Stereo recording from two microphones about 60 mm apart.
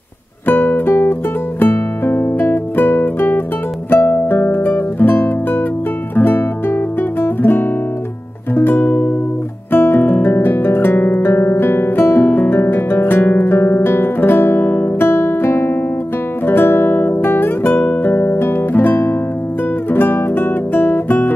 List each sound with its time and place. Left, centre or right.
0.5 s music: left
1.6 s guitar: left
3.9 s music: left
6.1 s guitar: left
8.5 s music: left
9.7 s guitar: left
19.9 s music: left